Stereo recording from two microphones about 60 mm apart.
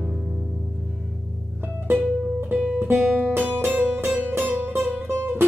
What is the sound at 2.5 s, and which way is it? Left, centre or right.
Guitar, right.